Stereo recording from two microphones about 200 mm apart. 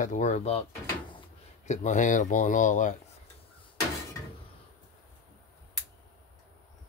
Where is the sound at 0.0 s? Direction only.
40° left (ahead or behind).